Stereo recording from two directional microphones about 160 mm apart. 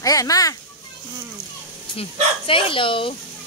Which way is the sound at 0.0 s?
20° left (ahead or behind).